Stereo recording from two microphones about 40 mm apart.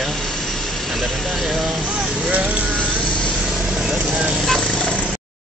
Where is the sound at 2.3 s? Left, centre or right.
Right.